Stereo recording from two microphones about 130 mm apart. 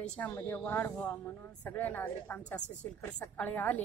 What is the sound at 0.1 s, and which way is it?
A woman's voice, 15° left (ahead or behind).